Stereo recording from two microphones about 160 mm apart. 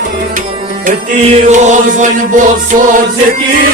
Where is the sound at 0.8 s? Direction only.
50° right (ahead or behind).